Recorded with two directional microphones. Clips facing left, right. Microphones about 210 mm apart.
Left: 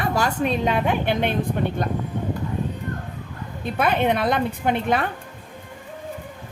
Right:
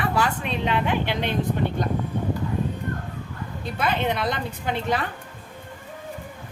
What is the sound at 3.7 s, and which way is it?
A woman's voice, 55° left (ahead or behind).